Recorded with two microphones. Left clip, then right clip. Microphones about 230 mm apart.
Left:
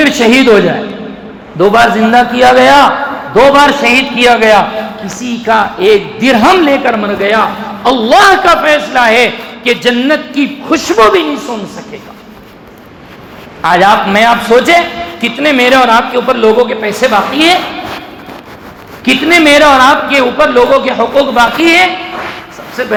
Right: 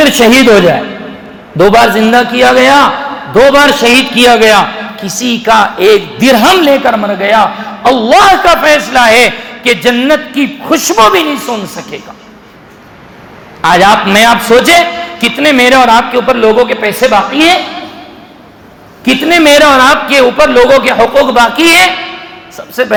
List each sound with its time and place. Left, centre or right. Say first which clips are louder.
0.0 s a man's voice: right 2 dB; right
13.6 s a man's voice: right 1 dB; right
19.0 s a man's voice: even; right
22.5 s a sound: right 5 dB; right